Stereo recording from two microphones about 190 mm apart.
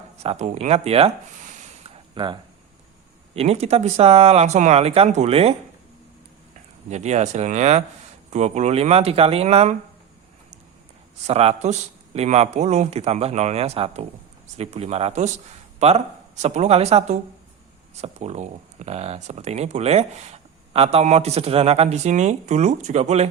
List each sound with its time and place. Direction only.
0.2 s speech: 35° right (ahead or behind)
2.1 s speech: 25° right (ahead or behind)
6.9 s speech: 35° right (ahead or behind)
11.3 s speech: 35° right (ahead or behind)